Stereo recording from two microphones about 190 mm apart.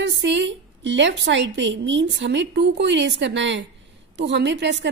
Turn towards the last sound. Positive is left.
turn(degrees=-65)  # may be behind; listen again after turning